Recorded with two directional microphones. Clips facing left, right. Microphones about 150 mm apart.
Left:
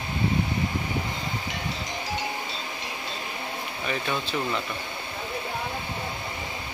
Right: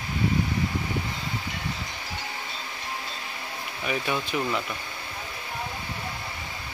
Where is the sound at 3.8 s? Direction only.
10° right (ahead or behind).